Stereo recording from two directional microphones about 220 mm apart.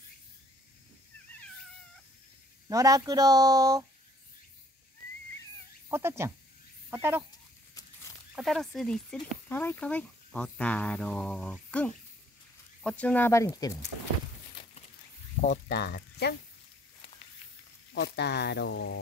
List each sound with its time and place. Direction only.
2.7 s speech: 15° right (ahead or behind)
5.9 s speech: 10° right (ahead or behind)
8.4 s speech: centre (ahead or behind)
15.7 s speech: 45° left (ahead or behind)
17.9 s speech: 50° left (ahead or behind)